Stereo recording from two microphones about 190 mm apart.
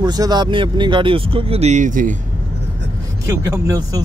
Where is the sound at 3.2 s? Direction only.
15° right (ahead or behind).